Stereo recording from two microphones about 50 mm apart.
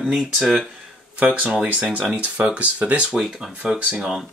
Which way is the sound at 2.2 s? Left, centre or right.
Right.